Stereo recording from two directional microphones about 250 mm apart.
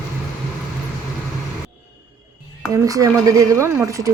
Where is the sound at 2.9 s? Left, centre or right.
Centre.